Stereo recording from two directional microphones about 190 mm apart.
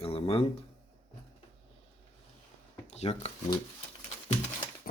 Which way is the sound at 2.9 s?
35° left (ahead or behind).